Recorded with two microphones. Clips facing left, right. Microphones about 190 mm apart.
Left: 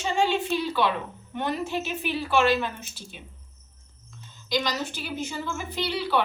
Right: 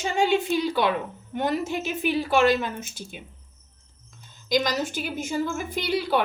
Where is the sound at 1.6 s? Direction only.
45° right (ahead or behind).